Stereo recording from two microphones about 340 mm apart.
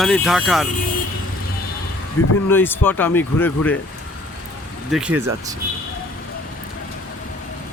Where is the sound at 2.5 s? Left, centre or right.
Centre.